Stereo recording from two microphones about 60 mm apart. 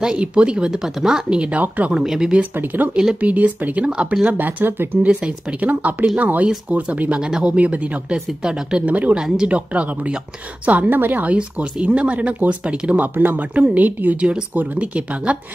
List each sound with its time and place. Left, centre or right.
0.0 s speech: centre
2.0 s speech: centre
2.5 s speech: right
2.9 s speech: centre
3.2 s speech: right
7.2 s speech: centre
7.5 s speech: right